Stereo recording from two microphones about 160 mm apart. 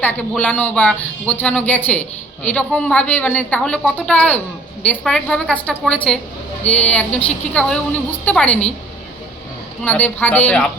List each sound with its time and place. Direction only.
0.0 s speech: 10° left (ahead or behind)
9.8 s speech: 10° left (ahead or behind)